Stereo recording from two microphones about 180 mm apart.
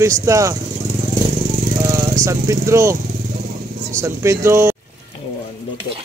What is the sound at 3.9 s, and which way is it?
Speech, 15° right (ahead or behind).